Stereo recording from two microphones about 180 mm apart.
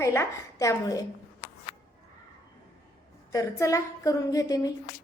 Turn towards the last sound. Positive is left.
turn(degrees=20)  # may be behind; listen again after turning